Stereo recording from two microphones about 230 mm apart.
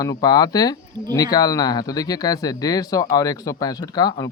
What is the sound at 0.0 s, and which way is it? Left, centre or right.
A man's voice, centre.